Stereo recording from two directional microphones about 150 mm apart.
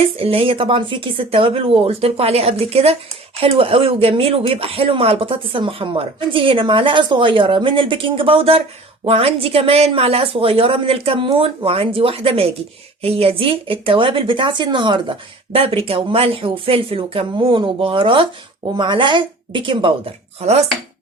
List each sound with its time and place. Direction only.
0.0 s speech: 40° right (ahead or behind)